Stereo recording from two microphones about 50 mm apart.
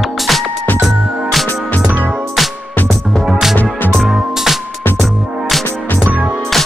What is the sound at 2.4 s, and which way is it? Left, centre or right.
Music, centre.